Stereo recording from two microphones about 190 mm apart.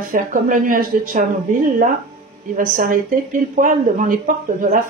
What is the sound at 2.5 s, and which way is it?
Speech, 45° right (ahead or behind).